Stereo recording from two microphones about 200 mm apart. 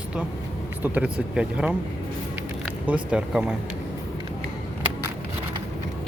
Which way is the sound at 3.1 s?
5° right (ahead or behind).